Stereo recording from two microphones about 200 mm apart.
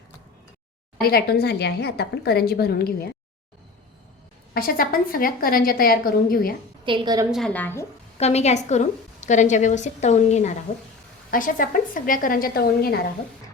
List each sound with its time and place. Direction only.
1.0 s a woman's voice: 50° left (ahead or behind)
4.5 s a woman's voice: 45° left (ahead or behind)
6.8 s a woman's voice: 25° right (ahead or behind)
7.3 s a woman's voice: centre (ahead or behind)
8.2 s a woman's voice: 35° left (ahead or behind); by 13.0 s 50° left (ahead or behind)